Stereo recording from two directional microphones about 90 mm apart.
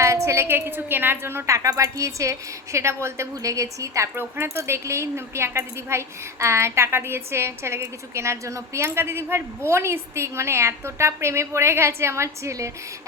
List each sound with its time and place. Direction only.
0.0 s a sound: 30° right (ahead or behind)
0.4 s a woman's voice: 20° right (ahead or behind)
1.5 s a woman's voice: 35° right (ahead or behind)